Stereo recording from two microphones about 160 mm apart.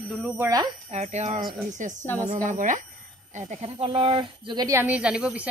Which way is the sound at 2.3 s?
50° right (ahead or behind).